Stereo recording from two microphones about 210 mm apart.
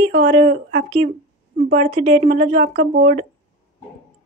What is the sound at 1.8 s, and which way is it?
Speech, 30° right (ahead or behind).